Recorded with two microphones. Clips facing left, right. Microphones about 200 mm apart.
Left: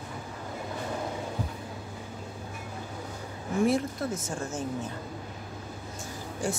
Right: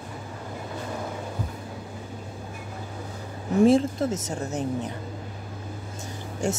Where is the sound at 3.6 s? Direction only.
25° right (ahead or behind).